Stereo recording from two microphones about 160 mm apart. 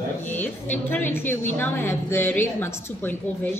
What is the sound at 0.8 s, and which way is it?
Speech, 15° left (ahead or behind).